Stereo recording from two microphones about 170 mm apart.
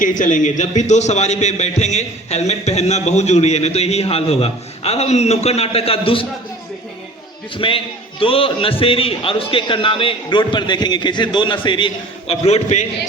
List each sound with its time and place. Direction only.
0.0 s a man's voice: 50° left (ahead or behind); by 6.2 s 30° left (ahead or behind)
7.5 s a man's voice: 30° left (ahead or behind)
12.3 s a man's voice: 40° left (ahead or behind)